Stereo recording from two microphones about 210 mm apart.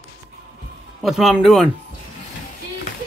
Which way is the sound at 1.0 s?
Centre (ahead or behind).